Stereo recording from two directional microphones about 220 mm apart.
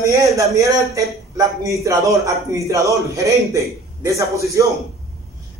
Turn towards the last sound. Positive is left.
turn(degrees=-15)  # may be behind; listen again after turning